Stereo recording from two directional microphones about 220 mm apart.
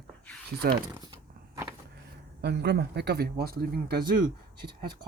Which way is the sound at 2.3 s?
50° right (ahead or behind).